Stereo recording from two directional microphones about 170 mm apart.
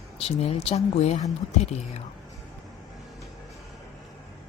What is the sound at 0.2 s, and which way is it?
Speech, 35° left (ahead or behind).